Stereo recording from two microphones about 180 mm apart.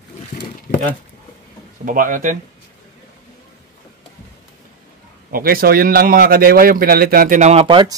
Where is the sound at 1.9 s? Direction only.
50° right (ahead or behind).